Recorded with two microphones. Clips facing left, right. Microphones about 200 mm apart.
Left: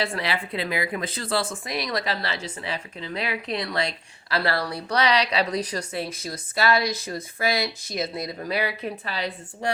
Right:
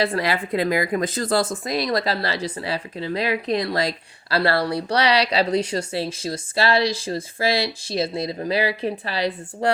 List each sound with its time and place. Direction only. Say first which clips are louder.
0.0 s a woman's voice: right 5 dB; 40° right (ahead or behind)